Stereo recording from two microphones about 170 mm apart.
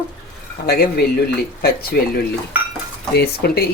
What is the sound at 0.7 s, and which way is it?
Speech, 60° left (ahead or behind).